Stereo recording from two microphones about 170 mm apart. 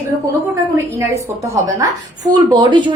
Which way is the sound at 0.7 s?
15° right (ahead or behind).